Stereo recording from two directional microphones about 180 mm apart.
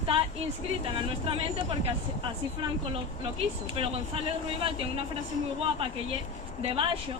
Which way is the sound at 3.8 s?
30° right (ahead or behind).